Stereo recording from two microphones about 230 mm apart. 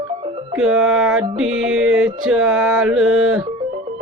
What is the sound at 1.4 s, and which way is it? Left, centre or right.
Music, right.